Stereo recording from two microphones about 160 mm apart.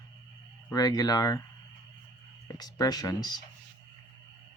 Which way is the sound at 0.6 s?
25° left (ahead or behind).